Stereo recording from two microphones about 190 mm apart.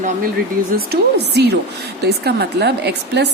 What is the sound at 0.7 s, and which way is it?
A woman's voice, 55° right (ahead or behind).